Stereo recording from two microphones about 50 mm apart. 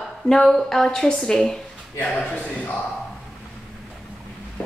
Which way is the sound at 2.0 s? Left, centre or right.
Left.